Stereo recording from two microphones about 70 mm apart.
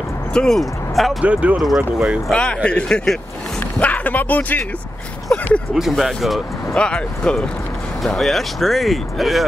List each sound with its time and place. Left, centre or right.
0.3 s speech: centre
1.2 s speech: right
2.3 s speech: centre
5.8 s speech: centre
6.8 s speech: centre
8.0 s speech: centre